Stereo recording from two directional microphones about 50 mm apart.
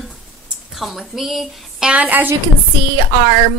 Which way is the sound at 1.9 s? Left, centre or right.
Right.